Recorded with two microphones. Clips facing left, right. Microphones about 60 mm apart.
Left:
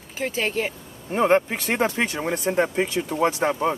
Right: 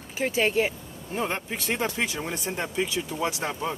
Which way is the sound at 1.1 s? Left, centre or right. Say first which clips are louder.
Left 10 dB; left.